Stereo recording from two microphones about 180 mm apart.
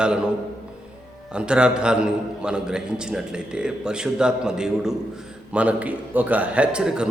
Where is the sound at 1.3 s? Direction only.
5° right (ahead or behind).